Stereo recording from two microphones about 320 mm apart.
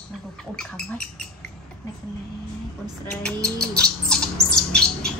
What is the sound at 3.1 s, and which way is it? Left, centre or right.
Bird, centre.